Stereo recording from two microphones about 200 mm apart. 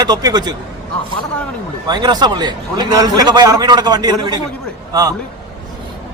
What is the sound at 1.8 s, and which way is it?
A man's voice, 20° right (ahead or behind).